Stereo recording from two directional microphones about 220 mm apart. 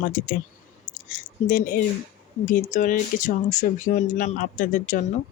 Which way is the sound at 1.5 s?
40° left (ahead or behind).